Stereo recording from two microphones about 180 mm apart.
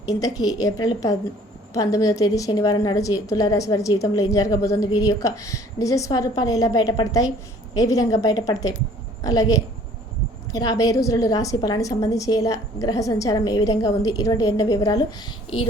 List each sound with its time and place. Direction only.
0.1 s a woman's voice: 20° left (ahead or behind)